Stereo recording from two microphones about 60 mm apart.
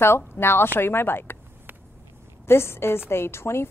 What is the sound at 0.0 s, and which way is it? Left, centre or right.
A woman's voice, left.